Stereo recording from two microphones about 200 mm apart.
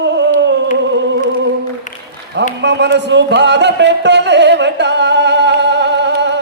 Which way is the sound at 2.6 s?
60° right (ahead or behind).